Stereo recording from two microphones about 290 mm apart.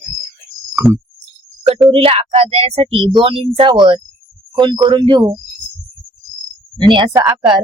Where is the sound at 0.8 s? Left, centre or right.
Centre.